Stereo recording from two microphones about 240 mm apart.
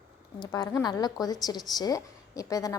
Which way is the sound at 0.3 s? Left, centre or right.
Centre.